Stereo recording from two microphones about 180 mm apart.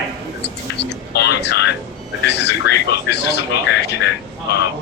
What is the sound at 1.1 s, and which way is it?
Speech, 70° left (ahead or behind).